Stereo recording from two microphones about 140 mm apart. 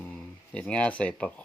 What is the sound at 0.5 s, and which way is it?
Speech, 5° left (ahead or behind).